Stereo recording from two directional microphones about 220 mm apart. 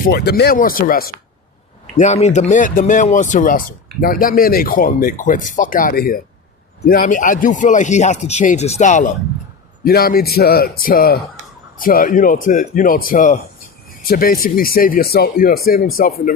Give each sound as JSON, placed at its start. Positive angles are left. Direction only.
{"t": 0.0, "sound": "a man's voice", "side_deg": 45}